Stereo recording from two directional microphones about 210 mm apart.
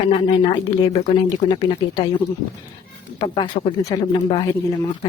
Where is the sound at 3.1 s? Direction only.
20° left (ahead or behind).